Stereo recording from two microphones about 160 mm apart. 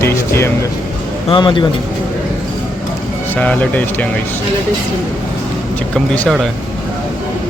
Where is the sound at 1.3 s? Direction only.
30° left (ahead or behind).